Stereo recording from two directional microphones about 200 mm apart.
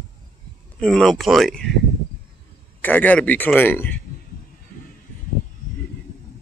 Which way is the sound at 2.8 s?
10° left (ahead or behind).